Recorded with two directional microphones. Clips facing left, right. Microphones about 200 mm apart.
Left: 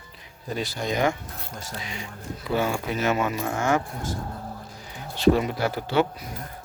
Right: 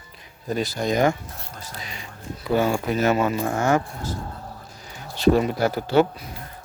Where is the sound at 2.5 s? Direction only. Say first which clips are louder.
Right 4 dB; 40° right (ahead or behind).